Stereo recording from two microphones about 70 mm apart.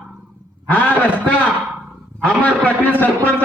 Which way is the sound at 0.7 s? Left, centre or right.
Left.